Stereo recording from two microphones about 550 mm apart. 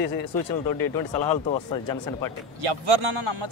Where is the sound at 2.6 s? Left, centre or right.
Right.